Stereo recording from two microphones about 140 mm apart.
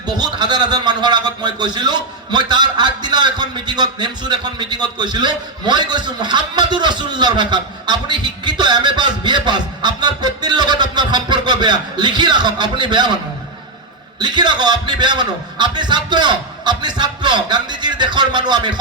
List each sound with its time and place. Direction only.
0.2 s a man's voice: 30° right (ahead or behind)
14.2 s a man's voice: 30° right (ahead or behind)